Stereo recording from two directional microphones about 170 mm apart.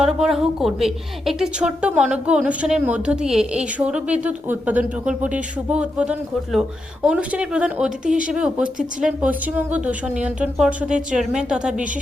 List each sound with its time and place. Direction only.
0.0 s a woman's voice: 5° right (ahead or behind)